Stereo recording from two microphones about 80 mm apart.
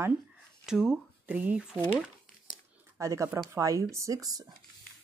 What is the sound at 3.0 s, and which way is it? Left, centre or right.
Speech, right.